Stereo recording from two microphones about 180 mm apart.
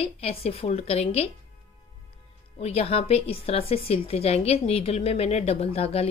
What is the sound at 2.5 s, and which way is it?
Speech, 35° left (ahead or behind).